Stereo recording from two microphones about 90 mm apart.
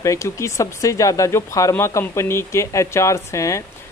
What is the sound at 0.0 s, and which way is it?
A man's voice, 35° left (ahead or behind).